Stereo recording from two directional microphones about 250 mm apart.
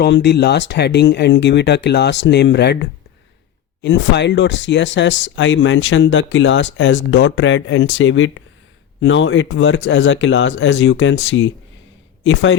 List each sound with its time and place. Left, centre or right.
0.0 s speech: left
3.8 s speech: left